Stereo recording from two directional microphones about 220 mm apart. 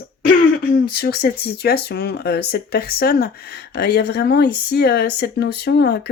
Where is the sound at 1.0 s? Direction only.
45° left (ahead or behind).